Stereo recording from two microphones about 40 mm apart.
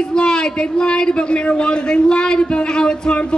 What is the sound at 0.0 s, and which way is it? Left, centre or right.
A man's voice, left.